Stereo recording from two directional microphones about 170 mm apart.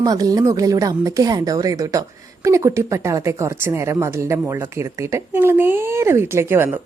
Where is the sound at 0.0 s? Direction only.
20° right (ahead or behind).